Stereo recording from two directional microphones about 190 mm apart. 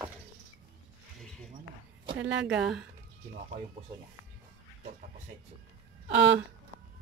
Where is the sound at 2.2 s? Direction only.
70° right (ahead or behind).